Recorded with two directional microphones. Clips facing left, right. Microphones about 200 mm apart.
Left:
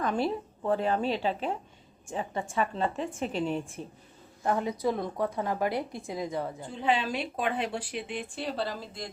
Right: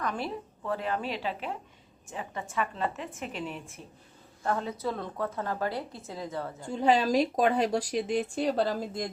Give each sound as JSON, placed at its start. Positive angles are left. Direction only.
{"t": 0.0, "sound": "a woman's voice", "side_deg": 30}
{"t": 4.4, "sound": "a woman's voice", "side_deg": 15}
{"t": 6.7, "sound": "speech", "side_deg": -40}